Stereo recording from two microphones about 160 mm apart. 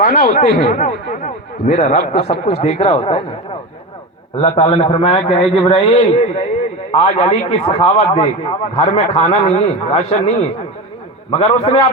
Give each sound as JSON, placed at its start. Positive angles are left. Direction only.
{"t": 0.0, "sound": "speech", "side_deg": 55}
{"t": 4.4, "sound": "a man's voice", "side_deg": 35}